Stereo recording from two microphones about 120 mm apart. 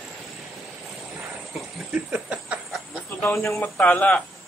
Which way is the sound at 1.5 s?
5° right (ahead or behind).